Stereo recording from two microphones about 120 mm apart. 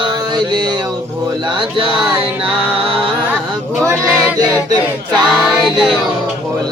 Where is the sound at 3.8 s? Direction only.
25° right (ahead or behind).